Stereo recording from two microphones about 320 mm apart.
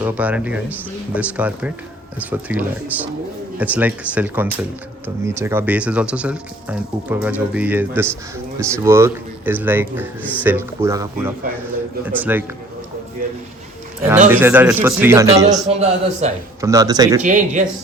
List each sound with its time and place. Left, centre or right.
0.0 s a man's voice: centre
14.3 s a man's voice: centre
17.2 s speech: right